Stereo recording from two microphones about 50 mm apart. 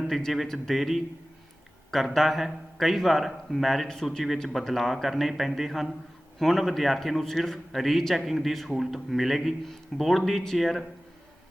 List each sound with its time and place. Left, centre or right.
0.1 s a man's voice: centre